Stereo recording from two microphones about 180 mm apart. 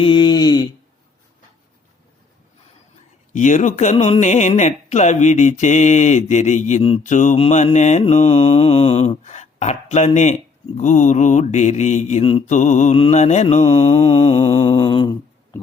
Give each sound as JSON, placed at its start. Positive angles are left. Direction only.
{"t": 0.0, "sound": "mantra", "side_deg": 25}
{"t": 3.3, "sound": "speech", "side_deg": 45}
{"t": 13.7, "sound": "mantra", "side_deg": 30}